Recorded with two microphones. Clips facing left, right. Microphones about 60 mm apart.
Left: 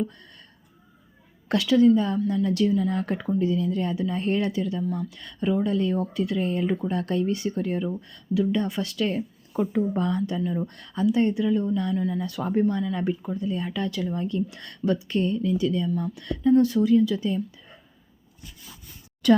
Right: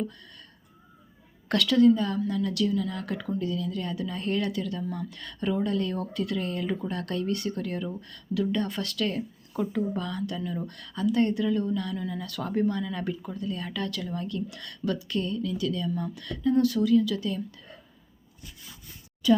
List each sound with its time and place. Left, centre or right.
1.5 s speech: centre
2.3 s speech: left
11.0 s speech: centre
16.0 s speech: centre
16.2 s speech: left
19.2 s speech: left